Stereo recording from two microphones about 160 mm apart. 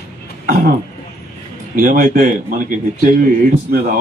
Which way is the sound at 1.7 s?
60° right (ahead or behind).